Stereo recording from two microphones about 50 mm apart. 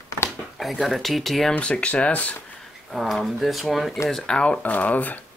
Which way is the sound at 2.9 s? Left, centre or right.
Centre.